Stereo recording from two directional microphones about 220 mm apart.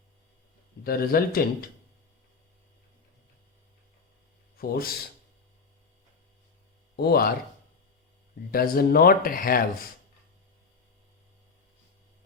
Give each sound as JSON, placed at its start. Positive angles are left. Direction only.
{"t": 0.9, "sound": "speech", "side_deg": 40}
{"t": 4.5, "sound": "speech", "side_deg": 45}
{"t": 6.9, "sound": "speech", "side_deg": 45}
{"t": 8.4, "sound": "speech", "side_deg": 40}